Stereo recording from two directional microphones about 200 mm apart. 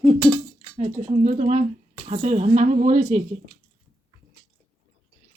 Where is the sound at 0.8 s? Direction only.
35° right (ahead or behind).